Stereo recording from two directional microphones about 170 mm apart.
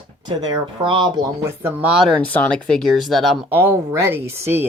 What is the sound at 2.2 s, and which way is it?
Speech, 10° left (ahead or behind).